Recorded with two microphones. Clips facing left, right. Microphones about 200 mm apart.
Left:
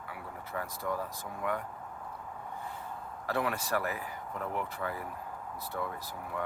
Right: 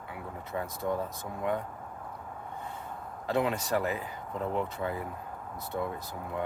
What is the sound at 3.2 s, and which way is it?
Speech, 20° right (ahead or behind).